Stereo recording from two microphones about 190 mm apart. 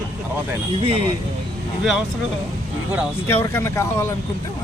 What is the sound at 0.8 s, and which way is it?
Speech, 30° right (ahead or behind).